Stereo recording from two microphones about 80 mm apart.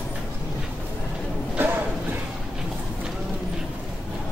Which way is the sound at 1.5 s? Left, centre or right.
Right.